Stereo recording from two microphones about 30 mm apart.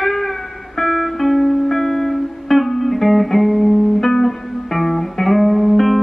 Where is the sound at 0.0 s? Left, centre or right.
Centre.